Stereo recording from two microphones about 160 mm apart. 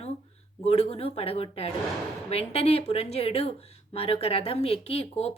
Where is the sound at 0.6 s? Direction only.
40° left (ahead or behind).